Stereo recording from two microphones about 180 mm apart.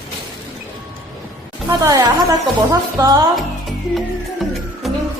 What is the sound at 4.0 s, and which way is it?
Music, centre (ahead or behind).